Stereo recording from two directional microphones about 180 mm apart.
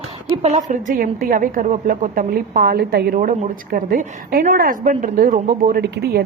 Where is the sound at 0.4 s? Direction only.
40° right (ahead or behind).